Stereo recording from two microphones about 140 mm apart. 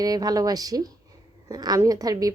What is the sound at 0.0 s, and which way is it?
A woman's voice, 25° right (ahead or behind).